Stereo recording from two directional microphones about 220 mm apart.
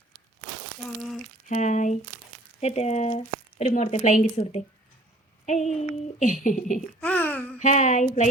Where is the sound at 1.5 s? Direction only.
35° left (ahead or behind).